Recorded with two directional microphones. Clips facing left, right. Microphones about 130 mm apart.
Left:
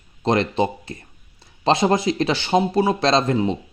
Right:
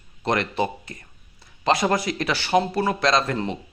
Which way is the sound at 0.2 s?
25° left (ahead or behind).